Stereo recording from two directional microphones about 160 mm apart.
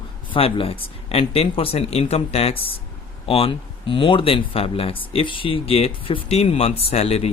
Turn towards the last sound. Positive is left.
turn(degrees=40)  # may be behind; listen again after turning